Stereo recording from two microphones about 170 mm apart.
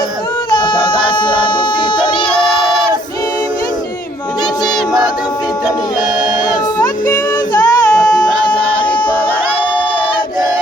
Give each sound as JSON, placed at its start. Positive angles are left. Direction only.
{"t": 1.1, "sound": "music", "side_deg": 25}
{"t": 6.7, "sound": "music", "side_deg": 20}